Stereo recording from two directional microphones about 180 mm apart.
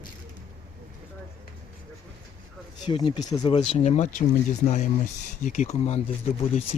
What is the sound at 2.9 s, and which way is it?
Speech, 25° left (ahead or behind).